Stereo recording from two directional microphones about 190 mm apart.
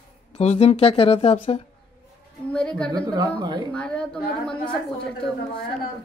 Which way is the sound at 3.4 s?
20° right (ahead or behind).